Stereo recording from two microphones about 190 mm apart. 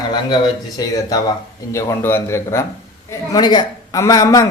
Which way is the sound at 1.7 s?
10° left (ahead or behind).